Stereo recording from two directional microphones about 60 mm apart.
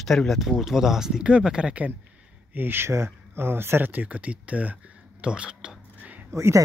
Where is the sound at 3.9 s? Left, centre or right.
Right.